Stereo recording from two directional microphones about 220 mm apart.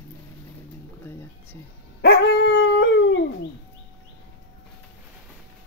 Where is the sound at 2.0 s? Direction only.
50° left (ahead or behind).